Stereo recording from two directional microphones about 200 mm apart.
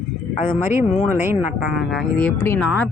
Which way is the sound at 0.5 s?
5° left (ahead or behind).